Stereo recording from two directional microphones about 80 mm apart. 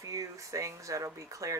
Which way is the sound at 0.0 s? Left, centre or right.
Right.